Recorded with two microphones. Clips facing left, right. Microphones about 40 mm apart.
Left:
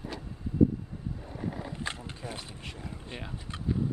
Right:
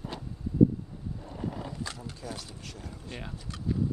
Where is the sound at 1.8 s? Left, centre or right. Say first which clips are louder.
Left 1 dB; left.